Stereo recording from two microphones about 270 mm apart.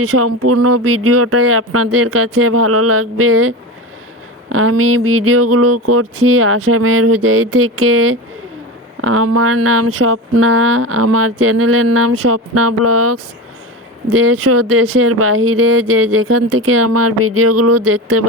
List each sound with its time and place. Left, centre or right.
0.0 s speech: right